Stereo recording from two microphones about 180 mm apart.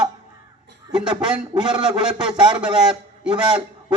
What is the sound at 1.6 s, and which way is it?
Speech, 25° right (ahead or behind).